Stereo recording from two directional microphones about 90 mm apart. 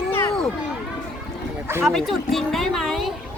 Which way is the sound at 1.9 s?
5° left (ahead or behind).